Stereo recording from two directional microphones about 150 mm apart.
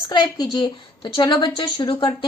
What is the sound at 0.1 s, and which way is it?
A woman's voice, 30° left (ahead or behind).